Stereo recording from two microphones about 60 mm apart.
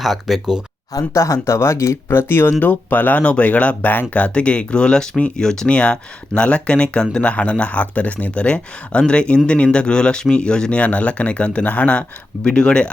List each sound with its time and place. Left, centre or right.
0.0 s speech: centre
1.1 s speech: left
3.8 s speech: left
4.1 s speech: left